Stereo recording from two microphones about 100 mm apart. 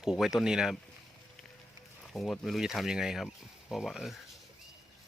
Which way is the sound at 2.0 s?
5° left (ahead or behind).